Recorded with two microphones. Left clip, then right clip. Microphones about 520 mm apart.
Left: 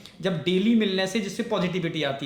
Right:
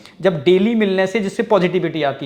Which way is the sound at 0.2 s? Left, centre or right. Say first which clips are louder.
Right 11 dB; centre.